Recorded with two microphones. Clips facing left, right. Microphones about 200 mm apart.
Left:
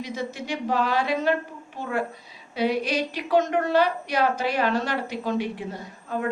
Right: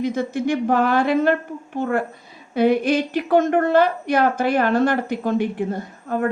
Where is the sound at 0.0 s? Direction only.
50° right (ahead or behind).